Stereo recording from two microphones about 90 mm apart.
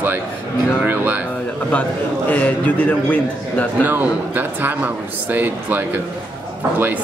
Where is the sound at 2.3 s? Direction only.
15° left (ahead or behind).